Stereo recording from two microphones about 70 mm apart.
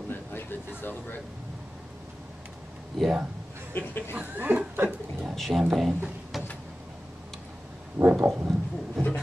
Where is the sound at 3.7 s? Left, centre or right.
Left.